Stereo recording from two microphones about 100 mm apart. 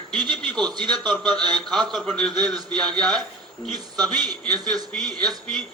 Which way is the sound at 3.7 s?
45° right (ahead or behind).